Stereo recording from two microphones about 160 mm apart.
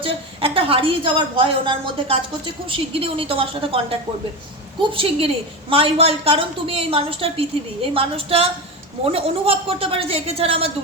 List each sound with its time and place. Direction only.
0.0 s a woman's voice: 35° right (ahead or behind)